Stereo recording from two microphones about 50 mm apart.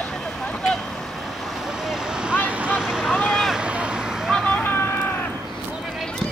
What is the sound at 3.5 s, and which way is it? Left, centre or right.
Vehicle, right.